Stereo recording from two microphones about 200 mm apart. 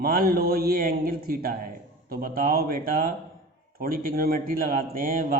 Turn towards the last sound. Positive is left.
turn(degrees=-45)  # may be behind; listen again after turning